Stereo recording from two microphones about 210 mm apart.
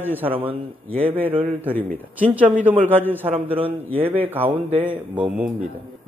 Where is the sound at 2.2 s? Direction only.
5° right (ahead or behind).